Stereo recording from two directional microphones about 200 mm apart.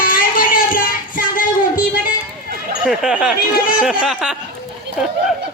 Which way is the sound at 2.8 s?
5° right (ahead or behind).